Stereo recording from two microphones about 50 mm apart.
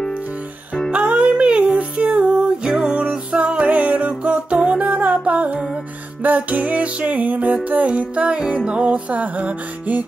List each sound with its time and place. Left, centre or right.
0.9 s music: right